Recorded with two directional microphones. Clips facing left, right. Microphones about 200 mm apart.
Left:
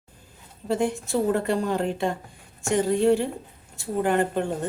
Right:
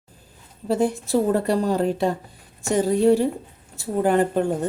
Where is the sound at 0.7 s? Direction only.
35° right (ahead or behind).